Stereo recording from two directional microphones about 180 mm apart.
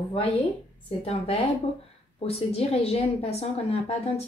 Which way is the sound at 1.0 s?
35° left (ahead or behind).